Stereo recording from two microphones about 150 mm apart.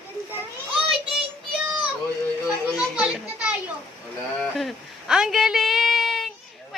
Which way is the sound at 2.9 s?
5° right (ahead or behind).